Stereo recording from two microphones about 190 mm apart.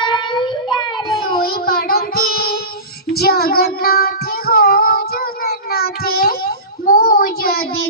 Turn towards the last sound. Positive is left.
turn(degrees=50)  # may be behind; listen again after turning